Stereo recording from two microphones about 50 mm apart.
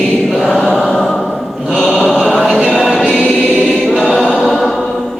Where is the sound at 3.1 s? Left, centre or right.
Centre.